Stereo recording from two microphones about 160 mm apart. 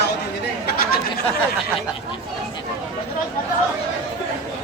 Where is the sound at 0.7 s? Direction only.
70° left (ahead or behind).